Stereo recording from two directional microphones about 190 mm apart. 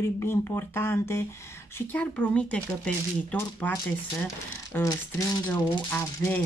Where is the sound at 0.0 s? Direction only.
15° left (ahead or behind).